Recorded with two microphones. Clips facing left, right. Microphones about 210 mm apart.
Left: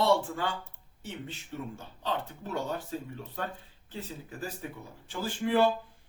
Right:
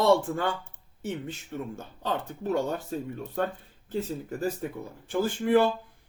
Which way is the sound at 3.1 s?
50° right (ahead or behind).